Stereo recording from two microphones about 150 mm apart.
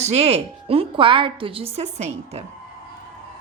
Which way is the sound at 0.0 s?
45° right (ahead or behind).